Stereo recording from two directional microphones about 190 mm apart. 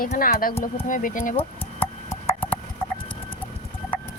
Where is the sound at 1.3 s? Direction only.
30° left (ahead or behind).